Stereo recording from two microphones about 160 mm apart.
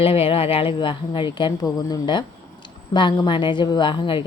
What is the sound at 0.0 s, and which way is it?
A woman's voice, 35° left (ahead or behind).